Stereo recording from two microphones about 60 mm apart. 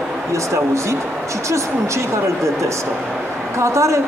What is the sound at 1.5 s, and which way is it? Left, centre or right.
A woman's voice, right.